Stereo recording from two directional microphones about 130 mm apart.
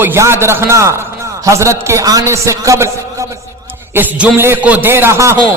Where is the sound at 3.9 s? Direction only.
15° right (ahead or behind).